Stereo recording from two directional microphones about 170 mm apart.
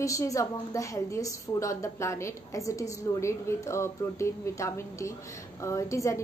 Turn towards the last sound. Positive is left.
turn(degrees=20)  # may be behind; listen again after turning